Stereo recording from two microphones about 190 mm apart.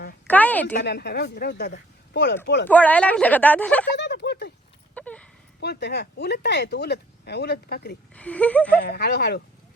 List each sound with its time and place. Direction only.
0.3 s a woman's voice: 10° left (ahead or behind)
0.8 s speech: 60° left (ahead or behind)
2.6 s a woman's voice: 10° left (ahead or behind)
3.9 s speech: 65° left (ahead or behind)
4.9 s a sound: 5° left (ahead or behind)
5.5 s speech: 60° left (ahead or behind)
8.1 s a woman's voice: 5° left (ahead or behind)
8.8 s speech: 60° left (ahead or behind)